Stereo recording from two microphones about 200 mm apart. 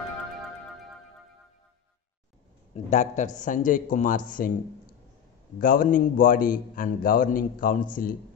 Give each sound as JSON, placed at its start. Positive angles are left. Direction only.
{"t": 2.7, "sound": "a man's voice", "side_deg": 35}
{"t": 5.6, "sound": "a man's voice", "side_deg": 45}